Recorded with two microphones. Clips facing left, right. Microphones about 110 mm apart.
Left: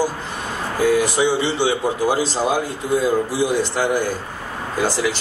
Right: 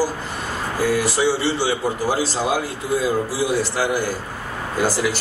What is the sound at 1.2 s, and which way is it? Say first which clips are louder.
Speech: left 1 dB; 20° left (ahead or behind).